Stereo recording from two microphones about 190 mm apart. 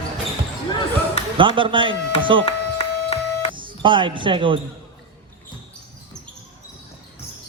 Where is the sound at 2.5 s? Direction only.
35° left (ahead or behind).